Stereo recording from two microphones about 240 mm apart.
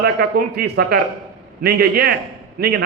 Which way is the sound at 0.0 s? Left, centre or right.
Right.